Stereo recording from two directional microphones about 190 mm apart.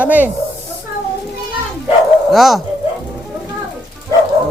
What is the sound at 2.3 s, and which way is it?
Speech, centre (ahead or behind).